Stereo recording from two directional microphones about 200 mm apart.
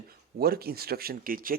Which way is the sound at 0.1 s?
50° right (ahead or behind).